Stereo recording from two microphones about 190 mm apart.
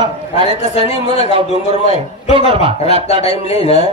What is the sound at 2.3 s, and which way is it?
Speech, 30° right (ahead or behind).